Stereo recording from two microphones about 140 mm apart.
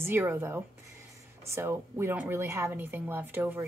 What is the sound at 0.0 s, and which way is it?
A woman's voice, 15° right (ahead or behind).